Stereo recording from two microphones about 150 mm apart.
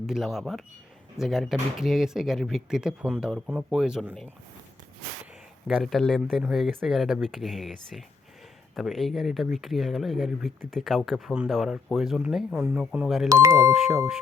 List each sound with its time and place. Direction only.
0.0 s speech: centre (ahead or behind)
5.2 s a sound: 5° right (ahead or behind)
6.2 s speech: 5° right (ahead or behind)
13.2 s speech: 20° right (ahead or behind)